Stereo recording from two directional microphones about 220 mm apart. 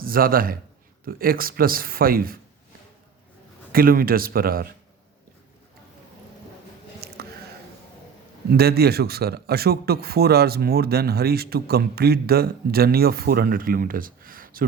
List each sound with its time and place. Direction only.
0.0 s a man's voice: 40° right (ahead or behind)
3.7 s speech: 40° right (ahead or behind)
7.2 s a sound: 45° right (ahead or behind)
8.4 s speech: 45° right (ahead or behind)